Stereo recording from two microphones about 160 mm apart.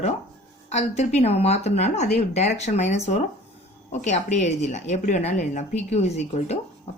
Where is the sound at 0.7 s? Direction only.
45° left (ahead or behind).